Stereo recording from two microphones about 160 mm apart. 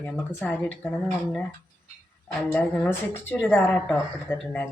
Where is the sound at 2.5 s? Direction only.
10° left (ahead or behind).